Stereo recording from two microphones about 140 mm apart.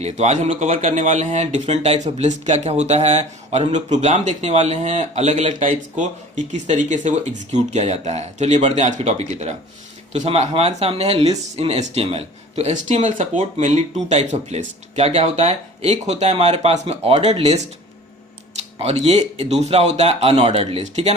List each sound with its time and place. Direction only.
0.0 s speech: 55° right (ahead or behind)
13.3 s speech: 50° right (ahead or behind)